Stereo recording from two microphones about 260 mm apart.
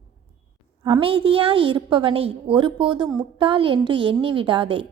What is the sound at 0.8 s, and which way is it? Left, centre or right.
A woman's voice, centre.